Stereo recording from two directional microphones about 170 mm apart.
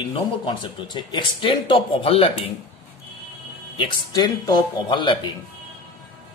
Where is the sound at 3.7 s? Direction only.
30° left (ahead or behind).